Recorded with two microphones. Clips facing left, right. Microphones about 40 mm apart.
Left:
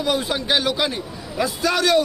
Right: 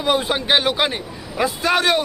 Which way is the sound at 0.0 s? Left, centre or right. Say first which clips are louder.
Right 3 dB; right.